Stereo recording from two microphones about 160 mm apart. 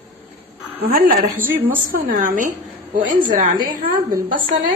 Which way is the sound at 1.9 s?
60° right (ahead or behind).